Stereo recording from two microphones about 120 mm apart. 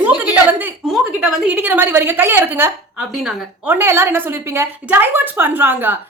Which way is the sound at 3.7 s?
20° right (ahead or behind).